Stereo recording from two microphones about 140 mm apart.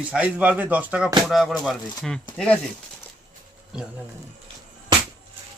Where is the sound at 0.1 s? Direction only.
10° right (ahead or behind).